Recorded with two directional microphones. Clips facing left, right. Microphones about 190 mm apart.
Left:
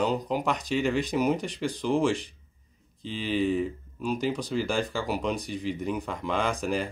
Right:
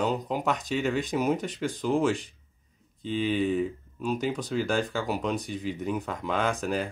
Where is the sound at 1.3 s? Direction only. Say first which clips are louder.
Even; 45° right (ahead or behind).